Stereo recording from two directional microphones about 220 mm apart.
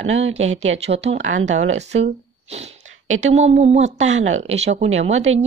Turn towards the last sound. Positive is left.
turn(degrees=-30)  # may be behind; listen again after turning